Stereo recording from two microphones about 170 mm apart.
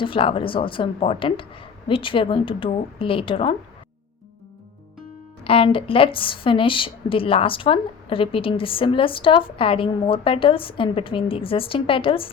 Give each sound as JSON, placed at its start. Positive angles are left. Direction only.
{"t": 0.0, "sound": "a woman's voice", "side_deg": 30}
{"t": 5.4, "sound": "a woman's voice", "side_deg": 35}